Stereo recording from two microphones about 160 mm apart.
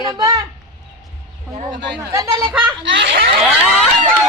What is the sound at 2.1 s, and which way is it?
Speech, 20° right (ahead or behind).